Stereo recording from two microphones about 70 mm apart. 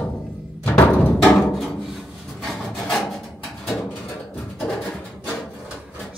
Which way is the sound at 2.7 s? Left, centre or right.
Centre.